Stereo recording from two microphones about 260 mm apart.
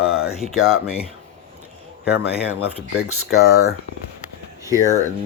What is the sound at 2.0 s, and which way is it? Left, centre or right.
Speech, left.